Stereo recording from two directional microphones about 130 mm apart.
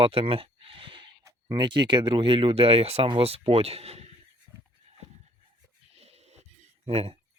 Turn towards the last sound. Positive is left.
turn(degrees=-50)  # may be behind; listen again after turning